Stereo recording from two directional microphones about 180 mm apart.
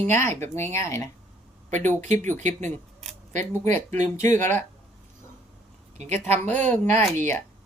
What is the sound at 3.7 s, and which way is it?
Speech, 15° left (ahead or behind).